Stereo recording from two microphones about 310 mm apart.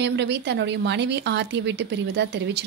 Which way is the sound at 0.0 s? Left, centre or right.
Right.